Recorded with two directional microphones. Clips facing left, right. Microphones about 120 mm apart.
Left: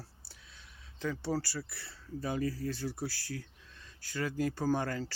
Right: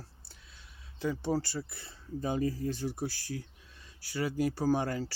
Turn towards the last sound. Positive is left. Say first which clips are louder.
# right 2 dB
turn(degrees=-15)  # may be behind; listen again after turning